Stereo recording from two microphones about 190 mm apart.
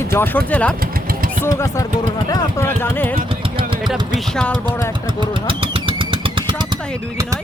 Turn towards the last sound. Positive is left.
turn(degrees=-25)  # may be behind; listen again after turning